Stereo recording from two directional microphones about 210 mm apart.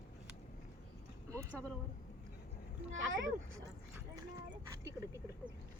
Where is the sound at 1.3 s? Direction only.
15° right (ahead or behind).